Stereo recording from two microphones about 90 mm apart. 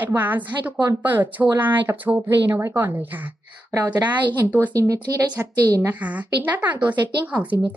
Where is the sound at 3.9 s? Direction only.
20° right (ahead or behind).